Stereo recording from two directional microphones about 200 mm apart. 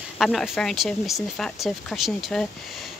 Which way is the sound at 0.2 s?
Centre (ahead or behind).